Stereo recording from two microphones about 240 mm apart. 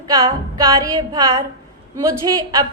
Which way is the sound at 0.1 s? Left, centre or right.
Centre.